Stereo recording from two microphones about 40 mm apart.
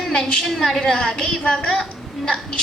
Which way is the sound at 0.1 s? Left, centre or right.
Centre.